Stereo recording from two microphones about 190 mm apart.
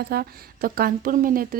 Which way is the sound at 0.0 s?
50° right (ahead or behind).